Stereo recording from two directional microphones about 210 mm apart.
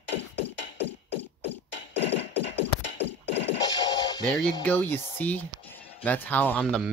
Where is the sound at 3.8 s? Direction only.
20° left (ahead or behind).